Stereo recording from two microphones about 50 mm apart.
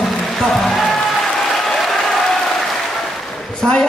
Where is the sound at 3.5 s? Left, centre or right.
Centre.